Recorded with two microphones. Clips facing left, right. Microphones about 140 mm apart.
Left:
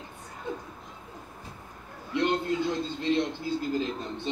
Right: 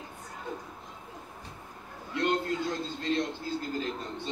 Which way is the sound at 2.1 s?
20° left (ahead or behind).